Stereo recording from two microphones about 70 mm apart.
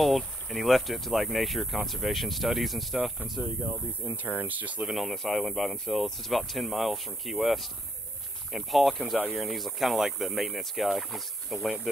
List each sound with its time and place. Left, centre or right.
0.0 s speech: centre
4.2 s speech: right
4.8 s speech: centre